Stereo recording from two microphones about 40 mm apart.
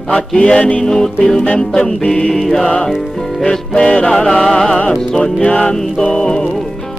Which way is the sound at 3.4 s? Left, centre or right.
Left.